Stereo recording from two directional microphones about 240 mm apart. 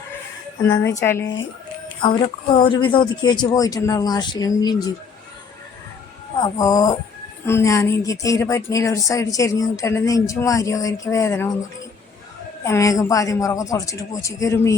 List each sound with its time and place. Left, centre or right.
0.6 s speech: centre
6.3 s speech: centre
12.6 s speech: centre